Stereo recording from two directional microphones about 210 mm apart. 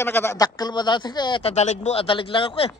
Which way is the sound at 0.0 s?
10° left (ahead or behind).